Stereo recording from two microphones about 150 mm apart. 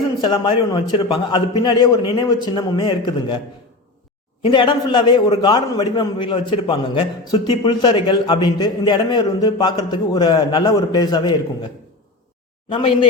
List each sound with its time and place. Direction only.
0.2 s a man's voice: 30° left (ahead or behind)
4.4 s a man's voice: 30° left (ahead or behind)